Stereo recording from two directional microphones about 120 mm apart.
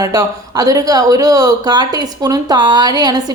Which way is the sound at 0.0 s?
30° right (ahead or behind).